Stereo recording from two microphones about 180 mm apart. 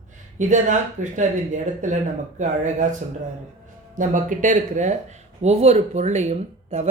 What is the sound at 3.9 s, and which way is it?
Speech, 45° right (ahead or behind).